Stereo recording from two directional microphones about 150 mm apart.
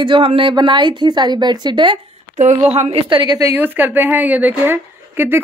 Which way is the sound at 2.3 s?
50° right (ahead or behind).